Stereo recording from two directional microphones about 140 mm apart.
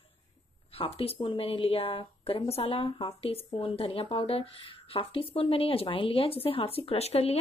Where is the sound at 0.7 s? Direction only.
45° left (ahead or behind).